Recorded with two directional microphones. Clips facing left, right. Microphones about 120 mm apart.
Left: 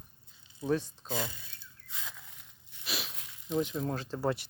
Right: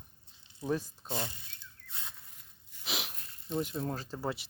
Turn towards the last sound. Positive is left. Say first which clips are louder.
# left 5 dB
turn(degrees=0)  # may be behind; listen again after turning